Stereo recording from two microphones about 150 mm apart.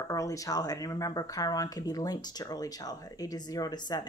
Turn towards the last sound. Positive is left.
turn(degrees=25)  # may be behind; listen again after turning